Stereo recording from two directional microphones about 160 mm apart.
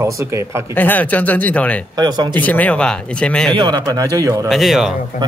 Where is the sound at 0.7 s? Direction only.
10° left (ahead or behind).